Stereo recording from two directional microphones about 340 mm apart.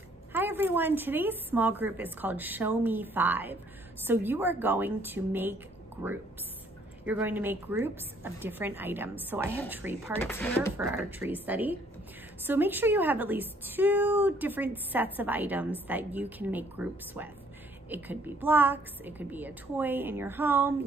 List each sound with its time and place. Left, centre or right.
0.3 s a woman's voice: centre
10.1 s a woman's voice: centre
10.9 s a woman's voice: centre